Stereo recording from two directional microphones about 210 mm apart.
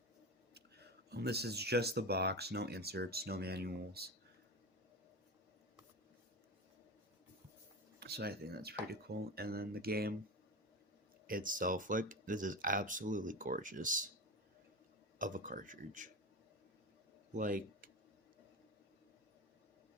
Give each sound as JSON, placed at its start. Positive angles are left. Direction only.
{"t": 0.5, "sound": "speech", "side_deg": -50}
{"t": 7.9, "sound": "speech", "side_deg": -50}
{"t": 11.3, "sound": "speech", "side_deg": -40}
{"t": 15.2, "sound": "speech", "side_deg": -40}
{"t": 17.3, "sound": "speech", "side_deg": -40}